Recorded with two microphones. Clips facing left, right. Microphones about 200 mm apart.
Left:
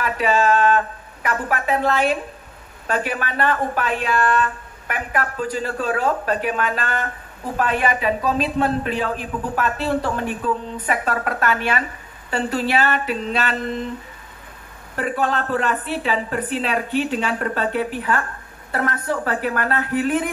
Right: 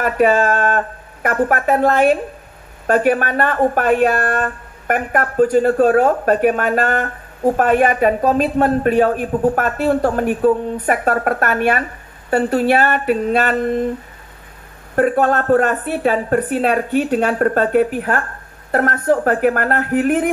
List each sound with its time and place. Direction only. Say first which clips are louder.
0.0 s speech: right 5 dB; 50° right (ahead or behind)
15.0 s speech: right 8 dB; 50° right (ahead or behind)